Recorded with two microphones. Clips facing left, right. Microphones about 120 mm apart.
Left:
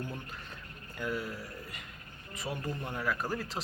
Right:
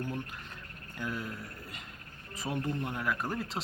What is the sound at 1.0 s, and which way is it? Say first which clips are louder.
A man's voice: left 2 dB; 20° right (ahead or behind).